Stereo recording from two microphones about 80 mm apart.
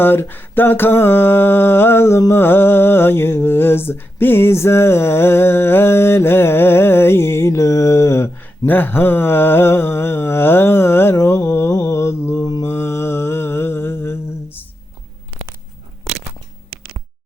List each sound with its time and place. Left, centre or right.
0.0 s mantra: left
2.3 s speech: left
8.6 s mantra: left